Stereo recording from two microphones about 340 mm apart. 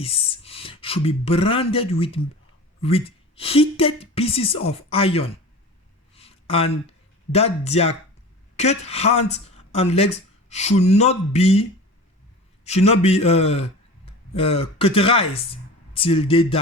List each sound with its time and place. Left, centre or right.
0.0 s speech: centre
6.1 s a sound: centre
7.3 s speech: centre
12.6 s a man's voice: centre